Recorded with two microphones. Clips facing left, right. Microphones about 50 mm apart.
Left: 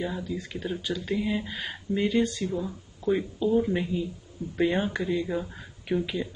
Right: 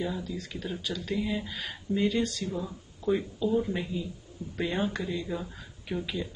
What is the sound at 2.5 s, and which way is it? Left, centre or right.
Speech, centre.